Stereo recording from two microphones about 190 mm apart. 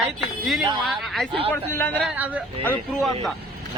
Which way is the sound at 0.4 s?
Centre (ahead or behind).